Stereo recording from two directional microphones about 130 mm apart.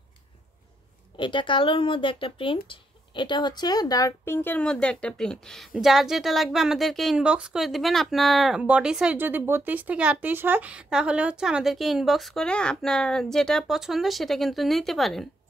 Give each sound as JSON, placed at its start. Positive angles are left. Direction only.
{"t": 1.1, "sound": "speech", "side_deg": 40}